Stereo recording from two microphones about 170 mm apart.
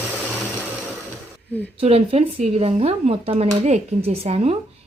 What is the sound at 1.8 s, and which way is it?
Speech, 35° right (ahead or behind).